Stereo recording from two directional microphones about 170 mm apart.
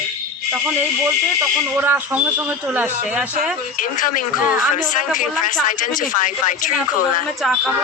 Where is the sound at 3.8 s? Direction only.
50° left (ahead or behind).